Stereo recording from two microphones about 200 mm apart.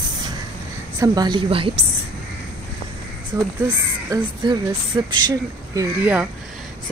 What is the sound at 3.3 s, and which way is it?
A woman's voice, 15° right (ahead or behind).